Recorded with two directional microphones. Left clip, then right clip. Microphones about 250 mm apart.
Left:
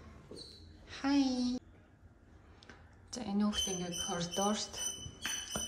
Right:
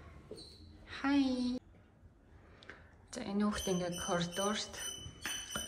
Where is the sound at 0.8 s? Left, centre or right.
Centre.